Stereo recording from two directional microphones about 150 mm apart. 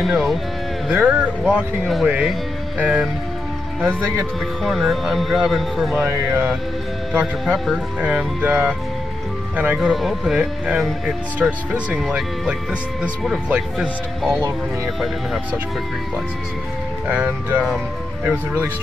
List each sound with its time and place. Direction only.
0.0 s speech: centre (ahead or behind)
4.6 s speech: centre (ahead or behind)
5.9 s speech: 15° right (ahead or behind)
7.1 s speech: 5° right (ahead or behind)
9.8 s speech: centre (ahead or behind)
17.1 s speech: 10° right (ahead or behind)